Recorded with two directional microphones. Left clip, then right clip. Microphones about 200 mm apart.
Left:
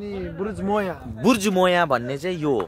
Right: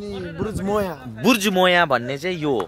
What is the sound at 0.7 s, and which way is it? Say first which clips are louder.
Speech: right 1 dB; 60° right (ahead or behind).